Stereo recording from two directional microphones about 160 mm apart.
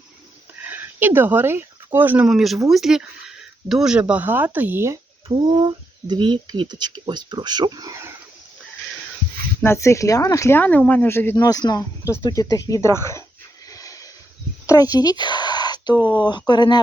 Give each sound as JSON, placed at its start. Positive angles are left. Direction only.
{"t": 0.6, "sound": "speech", "side_deg": -10}
{"t": 5.3, "sound": "speech", "side_deg": -30}
{"t": 9.6, "sound": "speech", "side_deg": 15}
{"t": 11.3, "sound": "speech", "side_deg": 25}
{"t": 13.7, "sound": "a sound", "side_deg": 20}
{"t": 16.0, "sound": "speech", "side_deg": -10}
{"t": 16.2, "sound": "speech", "side_deg": 25}